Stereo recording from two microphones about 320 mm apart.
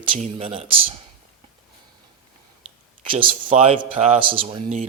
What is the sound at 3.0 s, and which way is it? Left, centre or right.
Speech, centre.